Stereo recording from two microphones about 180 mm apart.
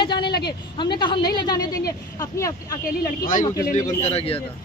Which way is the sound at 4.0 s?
35° left (ahead or behind).